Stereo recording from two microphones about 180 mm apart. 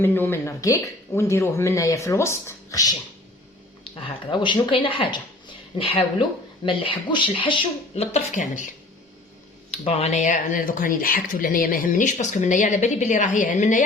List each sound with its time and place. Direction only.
0.0 s speech: 10° left (ahead or behind)
3.9 s speech: 30° left (ahead or behind)
9.7 s speech: 35° left (ahead or behind)